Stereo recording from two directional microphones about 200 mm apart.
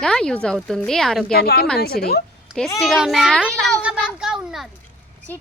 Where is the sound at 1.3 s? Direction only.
50° left (ahead or behind).